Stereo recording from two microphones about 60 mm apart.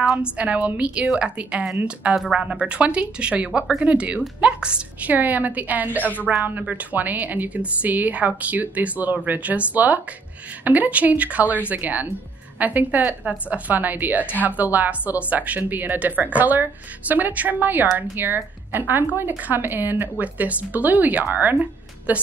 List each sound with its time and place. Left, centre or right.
0.2 s a woman's voice: right
5.1 s speech: right
6.3 s a woman's voice: centre